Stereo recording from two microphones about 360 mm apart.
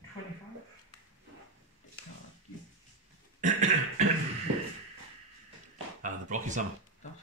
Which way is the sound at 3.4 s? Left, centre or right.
Centre.